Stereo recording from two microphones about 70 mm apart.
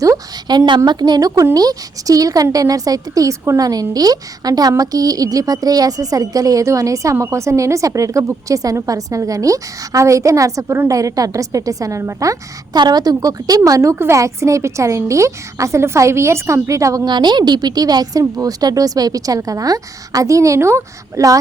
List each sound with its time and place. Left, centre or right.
0.4 s a woman's voice: right
1.5 s a woman's voice: right
3.6 s a woman's voice: right
12.7 s a woman's voice: right
13.1 s a woman's voice: right
14.1 s a woman's voice: right
17.1 s a woman's voice: right